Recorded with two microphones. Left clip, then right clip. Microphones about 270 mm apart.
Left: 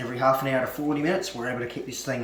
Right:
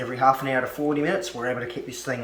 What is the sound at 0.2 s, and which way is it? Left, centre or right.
Speech, centre.